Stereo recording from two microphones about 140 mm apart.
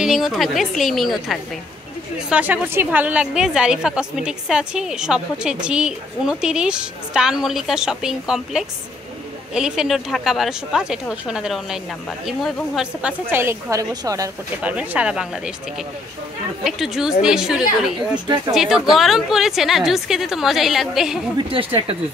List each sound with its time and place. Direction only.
0.0 s a woman's voice: centre (ahead or behind)
13.3 s a woman's voice: 15° right (ahead or behind)
14.6 s speech: 10° right (ahead or behind)
16.6 s a woman's voice: 5° right (ahead or behind)
17.9 s a woman's voice: 35° right (ahead or behind)
18.5 s a woman's voice: centre (ahead or behind)
21.4 s a woman's voice: 40° right (ahead or behind)